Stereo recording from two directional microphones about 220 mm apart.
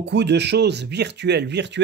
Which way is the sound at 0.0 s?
50° right (ahead or behind).